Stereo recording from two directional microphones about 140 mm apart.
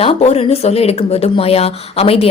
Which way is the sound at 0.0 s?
45° left (ahead or behind).